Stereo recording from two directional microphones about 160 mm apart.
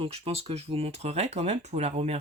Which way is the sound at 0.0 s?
40° right (ahead or behind).